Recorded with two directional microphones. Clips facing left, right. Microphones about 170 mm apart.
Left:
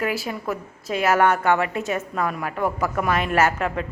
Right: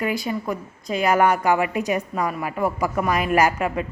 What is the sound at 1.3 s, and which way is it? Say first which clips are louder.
Speech: even; 10° right (ahead or behind).